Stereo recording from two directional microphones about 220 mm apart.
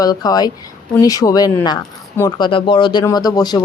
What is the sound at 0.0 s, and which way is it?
Speech, 15° left (ahead or behind).